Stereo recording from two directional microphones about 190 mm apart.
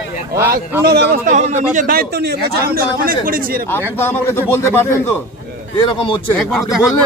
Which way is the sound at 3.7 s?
10° left (ahead or behind).